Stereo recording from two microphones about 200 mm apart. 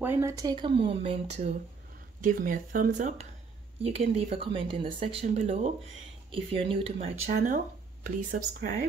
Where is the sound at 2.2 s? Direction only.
45° right (ahead or behind); by 7.1 s 30° right (ahead or behind).